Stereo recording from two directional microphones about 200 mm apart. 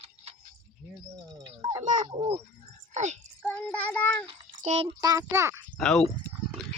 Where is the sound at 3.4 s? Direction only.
5° left (ahead or behind).